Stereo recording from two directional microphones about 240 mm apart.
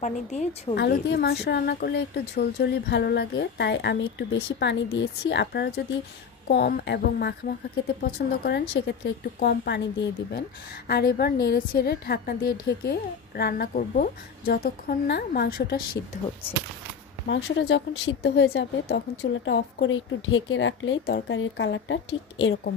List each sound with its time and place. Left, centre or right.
0.0 s a woman's voice: left
0.7 s a woman's voice: left
17.3 s speech: left